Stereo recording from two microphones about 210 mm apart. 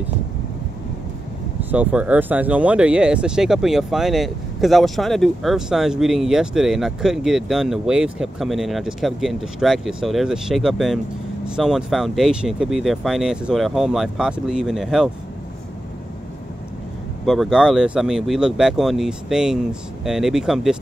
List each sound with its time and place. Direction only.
1.6 s speech: 10° right (ahead or behind)
17.3 s speech: centre (ahead or behind)